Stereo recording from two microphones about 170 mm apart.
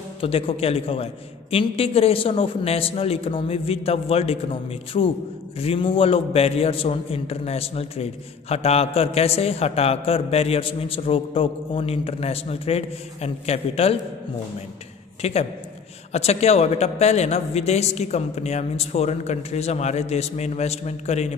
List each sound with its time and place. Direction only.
0.2 s a man's voice: 35° left (ahead or behind)
15.2 s a man's voice: 35° left (ahead or behind)